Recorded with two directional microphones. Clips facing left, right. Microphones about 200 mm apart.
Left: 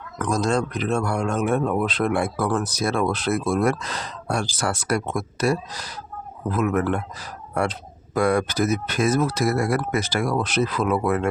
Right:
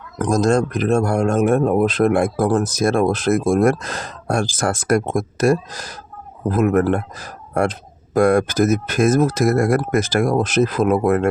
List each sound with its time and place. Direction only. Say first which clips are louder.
0.2 s a man's voice: right 6 dB; 45° right (ahead or behind)